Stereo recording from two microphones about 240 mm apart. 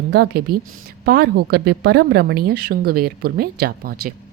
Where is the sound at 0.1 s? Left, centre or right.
Right.